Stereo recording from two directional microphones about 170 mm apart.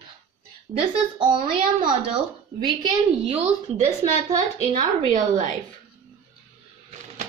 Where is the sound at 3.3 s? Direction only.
40° right (ahead or behind).